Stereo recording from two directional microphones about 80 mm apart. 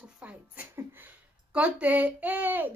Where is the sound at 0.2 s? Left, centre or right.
Centre.